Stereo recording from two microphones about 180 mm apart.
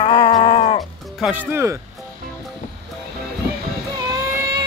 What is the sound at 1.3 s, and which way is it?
Speech, 10° right (ahead or behind).